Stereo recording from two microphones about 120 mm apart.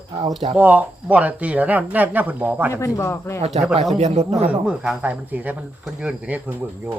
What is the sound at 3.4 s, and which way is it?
Speech, 70° right (ahead or behind).